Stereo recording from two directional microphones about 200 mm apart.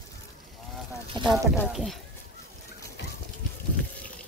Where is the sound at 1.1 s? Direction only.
25° right (ahead or behind).